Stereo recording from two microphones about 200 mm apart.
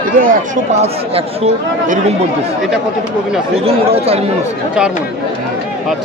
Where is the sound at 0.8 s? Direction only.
30° right (ahead or behind).